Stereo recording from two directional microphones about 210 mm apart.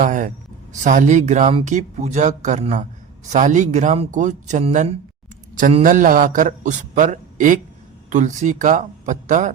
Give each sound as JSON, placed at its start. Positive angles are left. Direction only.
{"t": 0.0, "sound": "speech", "side_deg": -40}